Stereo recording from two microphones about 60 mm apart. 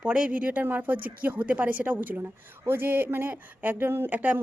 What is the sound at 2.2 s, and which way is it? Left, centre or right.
Speech, right.